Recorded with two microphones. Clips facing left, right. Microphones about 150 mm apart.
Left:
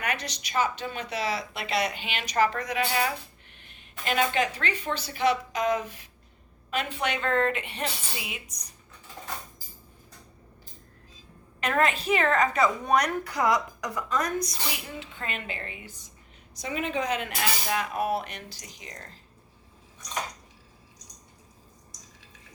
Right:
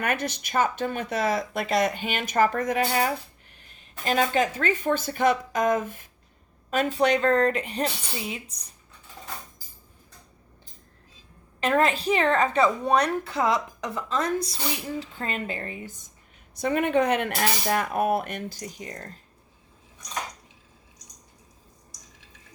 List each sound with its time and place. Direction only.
0.0 s a woman's voice: 50° right (ahead or behind); by 8.6 s 30° right (ahead or behind)
11.6 s a woman's voice: 30° right (ahead or behind)
16.6 s a woman's voice: 55° right (ahead or behind)